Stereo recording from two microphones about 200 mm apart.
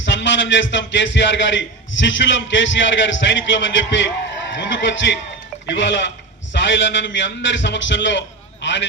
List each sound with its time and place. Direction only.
0.0 s a man's voice: 65° left (ahead or behind)